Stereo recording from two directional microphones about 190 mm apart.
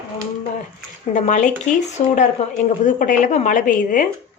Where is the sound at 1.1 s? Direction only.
40° left (ahead or behind).